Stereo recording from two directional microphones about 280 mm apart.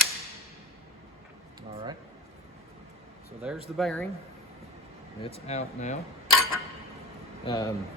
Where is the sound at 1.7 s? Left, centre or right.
Centre.